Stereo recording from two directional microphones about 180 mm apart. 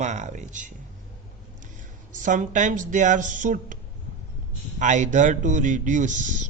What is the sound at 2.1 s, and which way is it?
Speech, 45° right (ahead or behind).